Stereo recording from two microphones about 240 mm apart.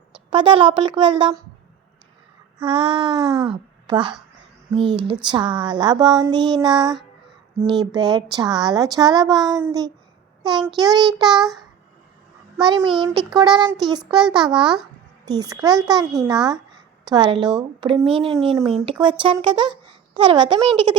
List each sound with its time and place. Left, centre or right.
0.3 s a child's voice: right
2.6 s a child's voice: right
10.4 s child singing: centre
10.8 s speech: centre
11.3 s a child's voice: centre
12.5 s a child's voice: centre